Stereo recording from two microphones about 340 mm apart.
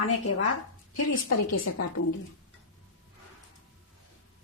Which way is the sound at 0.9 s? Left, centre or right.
Left.